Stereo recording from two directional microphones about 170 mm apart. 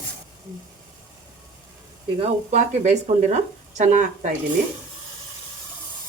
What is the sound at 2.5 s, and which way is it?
Speech, 45° right (ahead or behind).